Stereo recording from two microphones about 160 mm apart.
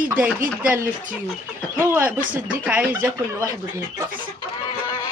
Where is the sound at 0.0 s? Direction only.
10° right (ahead or behind).